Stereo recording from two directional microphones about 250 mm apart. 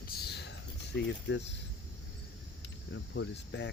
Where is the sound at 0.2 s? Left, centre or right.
Left.